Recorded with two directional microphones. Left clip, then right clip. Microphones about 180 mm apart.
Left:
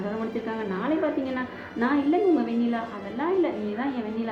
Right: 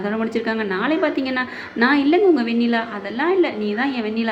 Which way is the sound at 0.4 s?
30° right (ahead or behind).